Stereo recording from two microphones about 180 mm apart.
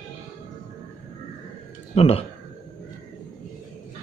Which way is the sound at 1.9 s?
35° left (ahead or behind).